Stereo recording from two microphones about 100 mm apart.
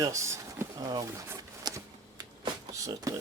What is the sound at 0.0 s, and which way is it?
Speech, 30° right (ahead or behind).